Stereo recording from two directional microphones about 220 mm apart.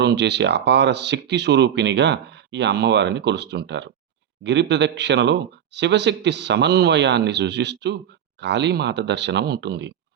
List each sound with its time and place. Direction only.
0.0 s speech: 50° right (ahead or behind)